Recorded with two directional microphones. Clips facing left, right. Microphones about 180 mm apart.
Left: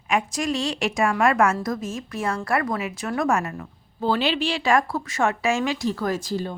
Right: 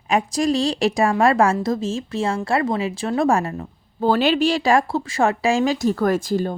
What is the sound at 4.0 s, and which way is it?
Speech, 45° right (ahead or behind).